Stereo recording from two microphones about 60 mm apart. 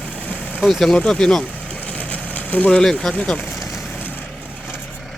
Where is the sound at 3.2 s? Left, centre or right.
Left.